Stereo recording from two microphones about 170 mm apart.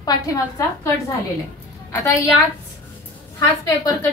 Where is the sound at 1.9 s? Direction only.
15° left (ahead or behind).